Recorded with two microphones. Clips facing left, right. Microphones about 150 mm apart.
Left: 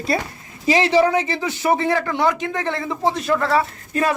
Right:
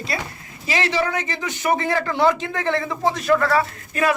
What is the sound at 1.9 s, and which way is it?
A woman's voice, 15° left (ahead or behind).